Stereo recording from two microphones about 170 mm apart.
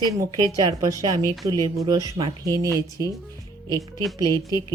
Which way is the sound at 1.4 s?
20° right (ahead or behind).